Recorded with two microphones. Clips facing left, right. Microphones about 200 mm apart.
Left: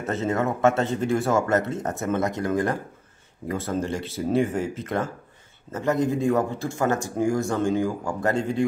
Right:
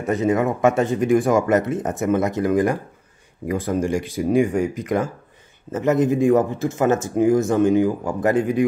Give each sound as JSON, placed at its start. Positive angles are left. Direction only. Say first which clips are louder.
{"t": 0.0, "sound": "a man's voice", "louder": "right 5 dB", "side_deg": -15}